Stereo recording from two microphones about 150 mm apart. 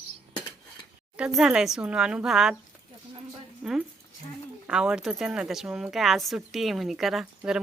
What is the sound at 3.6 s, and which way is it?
A woman's voice, 5° right (ahead or behind).